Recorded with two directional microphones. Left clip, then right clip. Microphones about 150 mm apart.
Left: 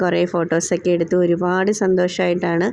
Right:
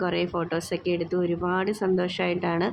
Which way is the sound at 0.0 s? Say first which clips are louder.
Left 8 dB; 30° left (ahead or behind).